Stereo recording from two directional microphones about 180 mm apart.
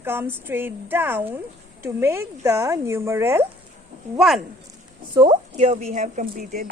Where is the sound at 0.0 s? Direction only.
10° right (ahead or behind).